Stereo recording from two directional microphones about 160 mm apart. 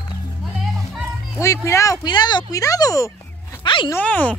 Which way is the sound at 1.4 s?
20° left (ahead or behind).